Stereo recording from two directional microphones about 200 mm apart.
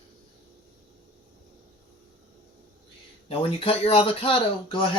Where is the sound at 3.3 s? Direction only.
25° left (ahead or behind).